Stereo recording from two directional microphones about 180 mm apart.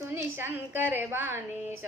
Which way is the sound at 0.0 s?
15° right (ahead or behind).